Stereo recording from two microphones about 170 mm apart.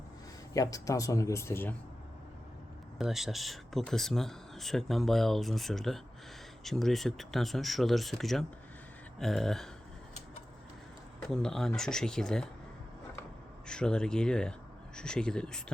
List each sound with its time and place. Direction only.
0.5 s speech: 20° left (ahead or behind)
3.0 s speech: centre (ahead or behind)
11.3 s speech: 5° left (ahead or behind)
13.7 s speech: 5° left (ahead or behind)